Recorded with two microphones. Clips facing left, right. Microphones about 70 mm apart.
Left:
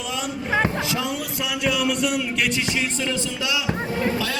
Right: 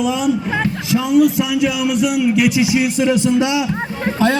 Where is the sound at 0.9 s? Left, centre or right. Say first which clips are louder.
Right 13 dB; centre; by 3.6 s right.